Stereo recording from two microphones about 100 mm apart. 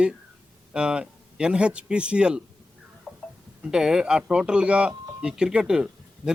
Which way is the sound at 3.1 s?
Centre (ahead or behind).